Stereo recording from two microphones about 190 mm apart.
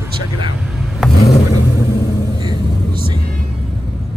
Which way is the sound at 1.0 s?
Centre (ahead or behind).